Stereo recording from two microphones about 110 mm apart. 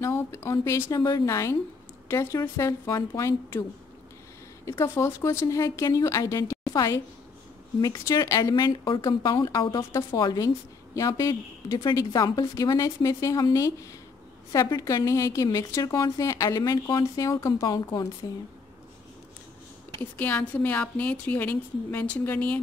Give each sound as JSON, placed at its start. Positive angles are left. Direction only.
{"t": 0.0, "sound": "speech", "side_deg": 25}
{"t": 4.6, "sound": "a woman's voice", "side_deg": 25}
{"t": 20.0, "sound": "a woman's voice", "side_deg": 15}